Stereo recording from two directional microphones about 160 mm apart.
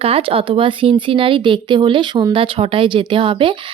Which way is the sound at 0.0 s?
35° right (ahead or behind).